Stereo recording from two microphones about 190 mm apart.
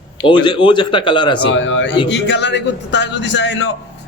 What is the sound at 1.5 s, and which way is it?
Speech, 80° left.